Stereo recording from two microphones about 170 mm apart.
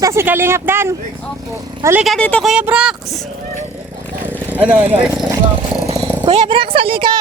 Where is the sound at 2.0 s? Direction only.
5° left (ahead or behind).